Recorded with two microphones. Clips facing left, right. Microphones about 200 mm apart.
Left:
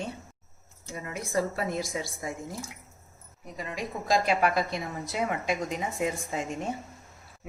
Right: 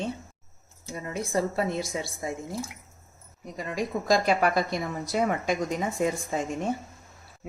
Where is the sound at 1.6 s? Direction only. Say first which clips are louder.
Right 3 dB; 25° right (ahead or behind).